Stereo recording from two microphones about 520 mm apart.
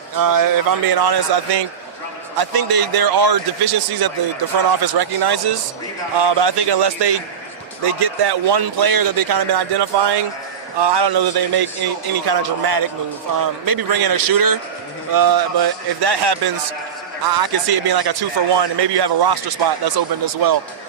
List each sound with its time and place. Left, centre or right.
0.2 s a man's voice: right